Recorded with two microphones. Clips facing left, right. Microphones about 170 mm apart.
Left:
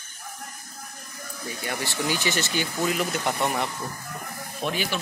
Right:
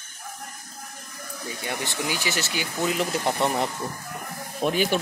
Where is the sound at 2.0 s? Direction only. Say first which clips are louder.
Left 3 dB; 10° right (ahead or behind).